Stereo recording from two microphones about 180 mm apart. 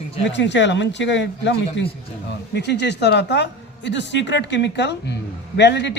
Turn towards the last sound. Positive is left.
turn(degrees=70)  # may be behind; listen again after turning